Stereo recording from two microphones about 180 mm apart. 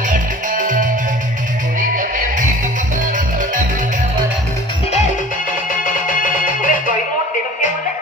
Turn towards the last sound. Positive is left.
turn(degrees=50)  # may be behind; listen again after turning